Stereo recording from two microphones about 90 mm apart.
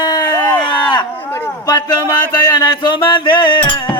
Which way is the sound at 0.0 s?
45° left (ahead or behind).